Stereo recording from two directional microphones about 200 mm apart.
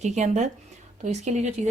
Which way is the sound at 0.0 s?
35° right (ahead or behind).